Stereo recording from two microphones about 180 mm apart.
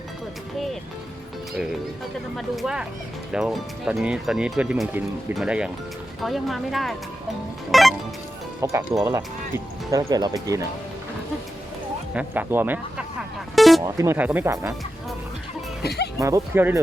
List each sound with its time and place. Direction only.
2.3 s speech: centre (ahead or behind)
7.7 s music: centre (ahead or behind)
8.6 s speech: 15° right (ahead or behind)
12.1 s speech: 10° right (ahead or behind)
13.6 s music: centre (ahead or behind)
13.8 s speech: 15° right (ahead or behind)
15.8 s speech: 65° left (ahead or behind)
16.1 s speech: 15° right (ahead or behind)